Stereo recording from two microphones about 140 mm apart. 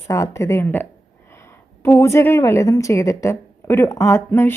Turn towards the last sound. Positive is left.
turn(degrees=15)  # may be behind; listen again after turning